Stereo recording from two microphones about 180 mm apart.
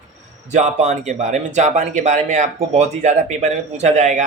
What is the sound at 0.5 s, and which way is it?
Speech, 40° right (ahead or behind).